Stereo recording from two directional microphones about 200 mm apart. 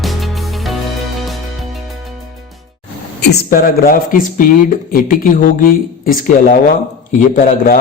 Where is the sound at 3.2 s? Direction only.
50° left (ahead or behind).